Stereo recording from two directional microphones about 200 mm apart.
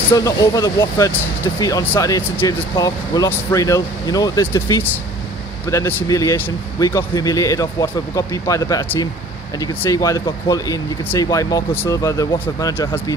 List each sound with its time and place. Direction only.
0.1 s speech: 15° left (ahead or behind)